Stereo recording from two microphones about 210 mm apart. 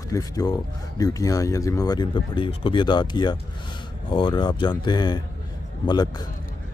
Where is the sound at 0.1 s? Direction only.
15° left (ahead or behind).